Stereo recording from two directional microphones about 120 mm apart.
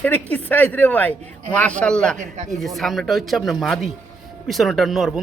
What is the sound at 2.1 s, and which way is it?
Speech, 80° right.